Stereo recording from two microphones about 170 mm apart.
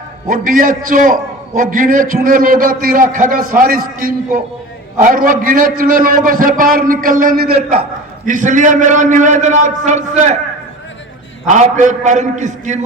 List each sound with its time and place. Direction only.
0.3 s a man's voice: 55° right (ahead or behind)
11.4 s a man's voice: 45° right (ahead or behind)